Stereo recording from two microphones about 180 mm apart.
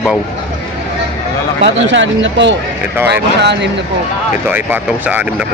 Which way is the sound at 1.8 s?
90° right.